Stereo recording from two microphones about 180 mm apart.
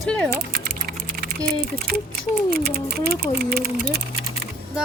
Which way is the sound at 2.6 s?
60° right (ahead or behind).